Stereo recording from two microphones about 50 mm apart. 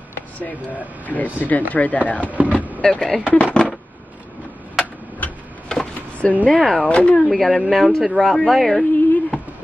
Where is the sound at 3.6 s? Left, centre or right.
Left.